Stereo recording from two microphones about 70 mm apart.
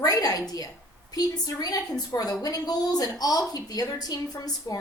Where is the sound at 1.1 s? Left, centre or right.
Left.